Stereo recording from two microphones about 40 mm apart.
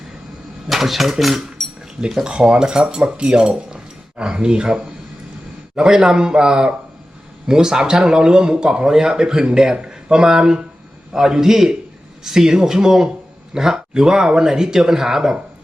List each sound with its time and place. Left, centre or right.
0.7 s speech: centre
2.2 s speech: right